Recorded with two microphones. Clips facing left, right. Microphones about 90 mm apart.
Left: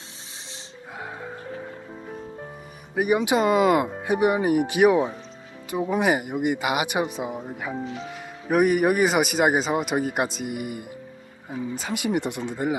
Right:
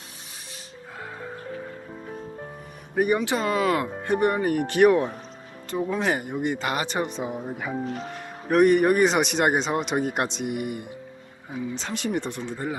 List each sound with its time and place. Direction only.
2.9 s speech: 5° left (ahead or behind)
3.2 s speech: 20° left (ahead or behind); by 7.8 s centre (ahead or behind)
7.9 s speech: 50° right (ahead or behind)
8.1 s speech: 5° left (ahead or behind)